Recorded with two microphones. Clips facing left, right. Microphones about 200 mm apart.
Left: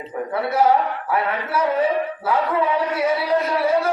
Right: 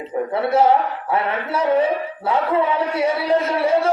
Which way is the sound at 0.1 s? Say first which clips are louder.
Right 4 dB; 25° right (ahead or behind).